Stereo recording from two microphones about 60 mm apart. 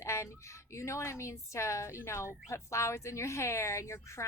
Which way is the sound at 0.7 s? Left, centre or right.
Left.